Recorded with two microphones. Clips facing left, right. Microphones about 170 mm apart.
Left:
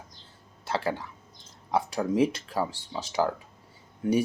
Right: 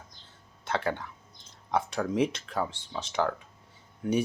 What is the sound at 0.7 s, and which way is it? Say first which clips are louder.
Speech: left 1 dB; 5° left (ahead or behind).